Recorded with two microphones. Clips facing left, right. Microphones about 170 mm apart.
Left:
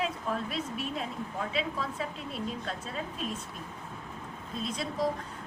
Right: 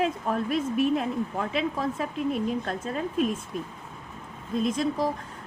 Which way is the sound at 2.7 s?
55° right (ahead or behind).